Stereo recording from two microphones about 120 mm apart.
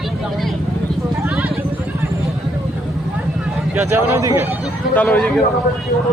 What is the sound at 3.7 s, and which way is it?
Speech, 20° right (ahead or behind).